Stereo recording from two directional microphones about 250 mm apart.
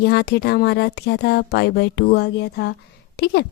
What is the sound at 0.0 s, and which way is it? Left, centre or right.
Speech, left.